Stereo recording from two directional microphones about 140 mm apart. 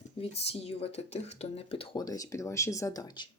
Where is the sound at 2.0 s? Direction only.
25° left (ahead or behind).